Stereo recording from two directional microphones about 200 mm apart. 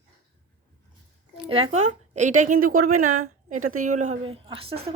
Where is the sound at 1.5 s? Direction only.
30° right (ahead or behind).